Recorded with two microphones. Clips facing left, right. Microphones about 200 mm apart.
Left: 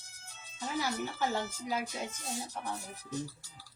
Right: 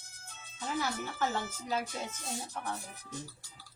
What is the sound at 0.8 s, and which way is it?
A woman's voice, 10° left (ahead or behind).